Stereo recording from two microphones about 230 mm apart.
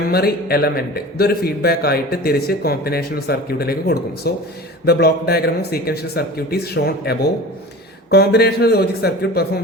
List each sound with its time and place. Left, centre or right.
0.1 s a man's voice: left